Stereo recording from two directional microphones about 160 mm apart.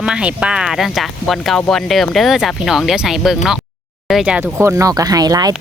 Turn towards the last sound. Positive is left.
turn(degrees=-25)  # may be behind; listen again after turning